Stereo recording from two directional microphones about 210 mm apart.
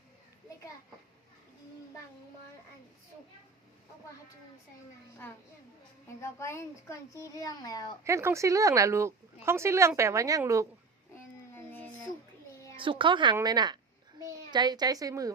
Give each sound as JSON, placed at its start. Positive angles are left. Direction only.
{"t": 6.1, "sound": "a child's voice", "side_deg": 15}
{"t": 8.0, "sound": "speech", "side_deg": -15}
{"t": 11.5, "sound": "a sound", "side_deg": 10}
{"t": 12.7, "sound": "a woman's voice", "side_deg": -25}